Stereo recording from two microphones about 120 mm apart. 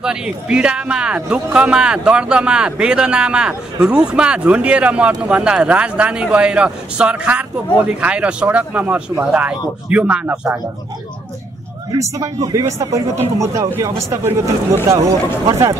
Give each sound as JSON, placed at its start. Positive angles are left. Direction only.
{"t": 0.0, "sound": "speech", "side_deg": -5}
{"t": 12.0, "sound": "speech", "side_deg": -30}